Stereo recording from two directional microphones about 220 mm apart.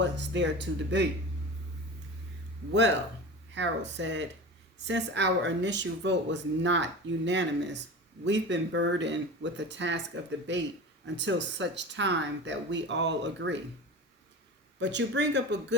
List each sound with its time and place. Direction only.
0.0 s speech: 55° right (ahead or behind)
3.5 s speech: 55° right (ahead or behind)
11.0 s speech: 55° right (ahead or behind)
14.8 s speech: 55° right (ahead or behind)